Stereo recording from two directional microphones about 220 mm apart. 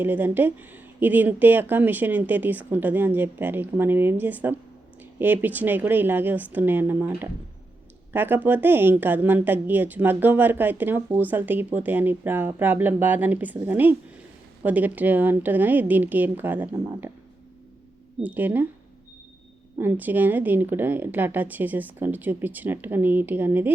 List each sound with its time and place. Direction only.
0.0 s a woman's voice: 10° right (ahead or behind)
8.1 s a woman's voice: 10° right (ahead or behind)
18.2 s a woman's voice: 10° right (ahead or behind)
19.8 s a woman's voice: 10° right (ahead or behind)